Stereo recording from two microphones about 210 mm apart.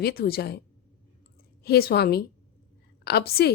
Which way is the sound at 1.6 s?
50° left (ahead or behind).